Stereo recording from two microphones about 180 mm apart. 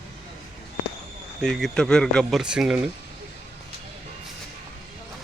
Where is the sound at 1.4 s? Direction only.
Centre (ahead or behind).